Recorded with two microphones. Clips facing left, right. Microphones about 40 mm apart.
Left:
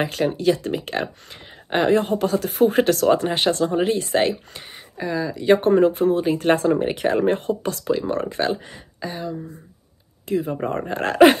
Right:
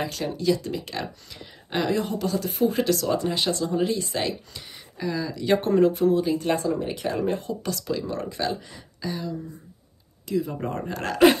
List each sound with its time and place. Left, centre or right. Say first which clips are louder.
0.0 s speech: left 6 dB; left
4.9 s speech: left 4 dB; left
7.6 s speech: left 6 dB; left